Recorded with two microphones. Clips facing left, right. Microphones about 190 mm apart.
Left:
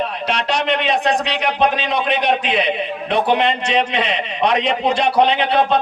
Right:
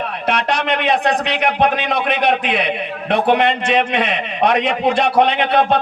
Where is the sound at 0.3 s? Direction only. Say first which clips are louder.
Right 2 dB; 55° right (ahead or behind).